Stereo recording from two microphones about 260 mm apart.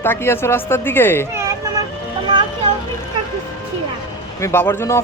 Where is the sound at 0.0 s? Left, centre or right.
Centre.